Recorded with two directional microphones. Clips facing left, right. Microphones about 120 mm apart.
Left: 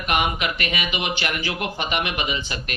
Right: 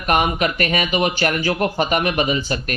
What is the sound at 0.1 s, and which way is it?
Speech, 40° right (ahead or behind).